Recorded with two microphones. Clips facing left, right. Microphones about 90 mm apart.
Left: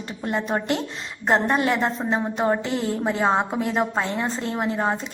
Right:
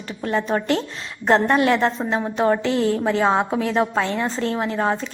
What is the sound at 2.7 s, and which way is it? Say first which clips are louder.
Speech: right 5 dB; 65° right (ahead or behind).